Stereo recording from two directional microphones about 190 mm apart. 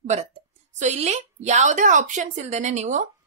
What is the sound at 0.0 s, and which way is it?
A woman's voice, 35° right (ahead or behind).